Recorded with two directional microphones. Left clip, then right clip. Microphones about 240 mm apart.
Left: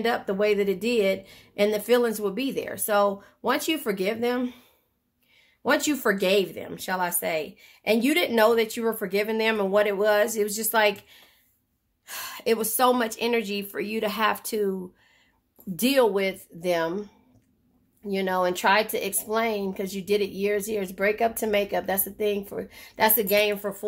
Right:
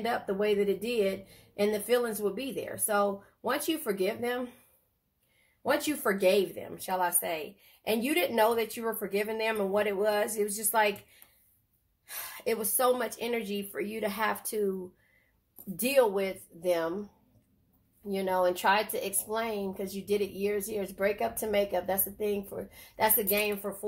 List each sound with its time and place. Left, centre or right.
0.0 s speech: left
5.6 s speech: left
12.1 s speech: left
15.7 s speech: left
18.0 s speech: left